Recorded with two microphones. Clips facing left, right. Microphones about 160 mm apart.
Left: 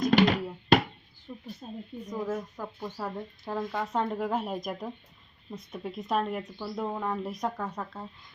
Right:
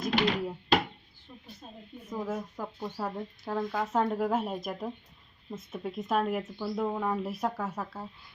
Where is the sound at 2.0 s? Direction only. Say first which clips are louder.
Left 1 dB; 10° right (ahead or behind).